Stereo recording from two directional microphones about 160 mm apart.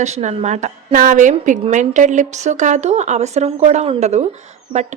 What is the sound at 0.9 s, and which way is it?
A woman's voice, 55° right (ahead or behind).